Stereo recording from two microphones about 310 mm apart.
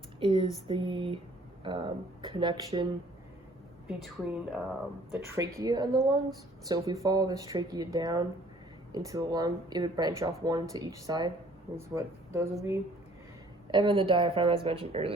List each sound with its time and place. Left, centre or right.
0.2 s speech: centre
3.8 s speech: centre